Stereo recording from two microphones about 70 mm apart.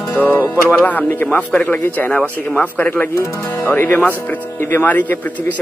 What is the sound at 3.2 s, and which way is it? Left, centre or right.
Speech, left.